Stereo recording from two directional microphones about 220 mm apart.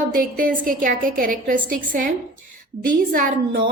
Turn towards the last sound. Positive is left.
turn(degrees=-40)  # may be behind; listen again after turning